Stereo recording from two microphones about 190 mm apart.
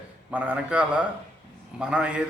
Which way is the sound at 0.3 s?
5° right (ahead or behind).